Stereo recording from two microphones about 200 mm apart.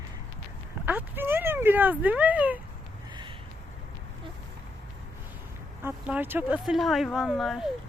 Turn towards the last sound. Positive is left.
turn(degrees=0)  # may be behind; listen again after turning